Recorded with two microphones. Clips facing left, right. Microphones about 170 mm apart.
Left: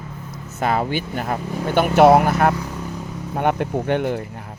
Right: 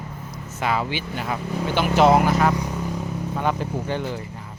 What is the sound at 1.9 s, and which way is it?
Speech, 55° left (ahead or behind).